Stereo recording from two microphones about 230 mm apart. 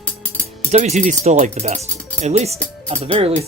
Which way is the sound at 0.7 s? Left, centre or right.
Right.